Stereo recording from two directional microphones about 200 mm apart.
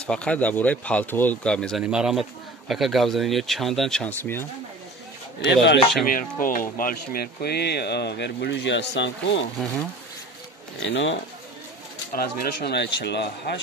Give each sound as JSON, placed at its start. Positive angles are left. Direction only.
{"t": 0.0, "sound": "speech", "side_deg": 5}
{"t": 5.5, "sound": "speech", "side_deg": 60}
{"t": 6.4, "sound": "speech", "side_deg": 45}
{"t": 9.6, "sound": "speech", "side_deg": 5}
{"t": 10.8, "sound": "speech", "side_deg": 65}
{"t": 12.1, "sound": "speech", "side_deg": 50}